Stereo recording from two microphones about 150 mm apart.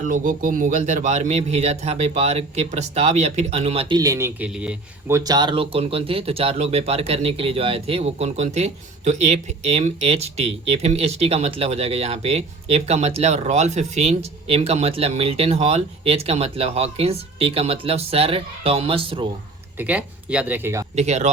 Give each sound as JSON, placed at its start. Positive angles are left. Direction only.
{"t": 0.0, "sound": "speech", "side_deg": -60}
{"t": 3.9, "sound": "speech", "side_deg": -20}
{"t": 4.4, "sound": "speech", "side_deg": -5}
{"t": 5.1, "sound": "speech", "side_deg": -25}
{"t": 19.8, "sound": "speech", "side_deg": -10}
{"t": 20.9, "sound": "speech", "side_deg": -50}